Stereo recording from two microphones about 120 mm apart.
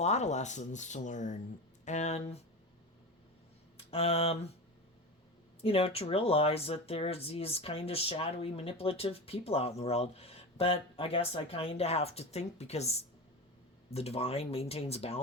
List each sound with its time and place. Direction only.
0.0 s speech: 70° left (ahead or behind); by 1.4 s 90° left
1.8 s speech: 80° left
3.9 s speech: 55° left (ahead or behind)
5.6 s speech: 55° left (ahead or behind)